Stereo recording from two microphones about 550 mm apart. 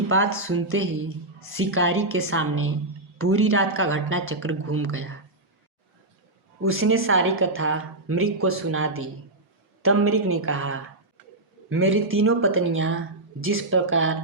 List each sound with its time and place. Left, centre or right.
0.1 s a woman's voice: right
6.6 s a woman's voice: right